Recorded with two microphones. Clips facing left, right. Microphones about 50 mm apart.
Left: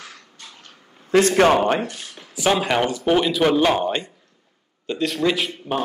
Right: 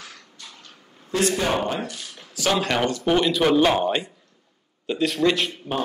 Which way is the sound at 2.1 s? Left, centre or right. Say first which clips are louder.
Left 3 dB; centre.